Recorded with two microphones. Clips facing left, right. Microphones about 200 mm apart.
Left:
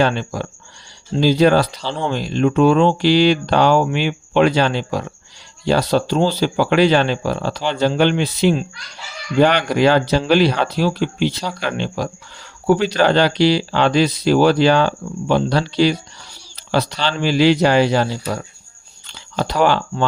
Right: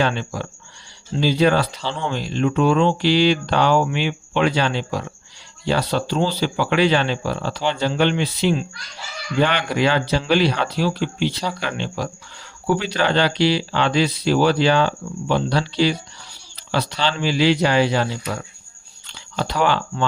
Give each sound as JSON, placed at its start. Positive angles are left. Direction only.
{"t": 0.0, "sound": "speech", "side_deg": 45}
{"t": 19.4, "sound": "speech", "side_deg": 45}